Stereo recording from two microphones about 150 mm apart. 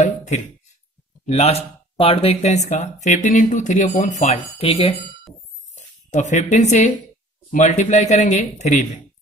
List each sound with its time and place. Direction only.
0.0 s a sound: 50° left (ahead or behind)
1.2 s speech: 45° left (ahead or behind)
5.8 s speech: 55° left (ahead or behind)